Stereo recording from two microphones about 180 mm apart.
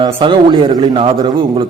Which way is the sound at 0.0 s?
25° right (ahead or behind).